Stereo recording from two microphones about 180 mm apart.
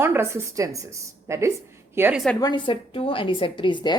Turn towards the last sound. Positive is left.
turn(degrees=25)  # may be behind; listen again after turning